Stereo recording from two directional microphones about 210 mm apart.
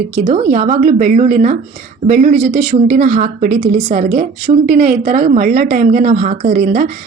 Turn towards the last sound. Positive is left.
turn(degrees=-40)  # may be behind; listen again after turning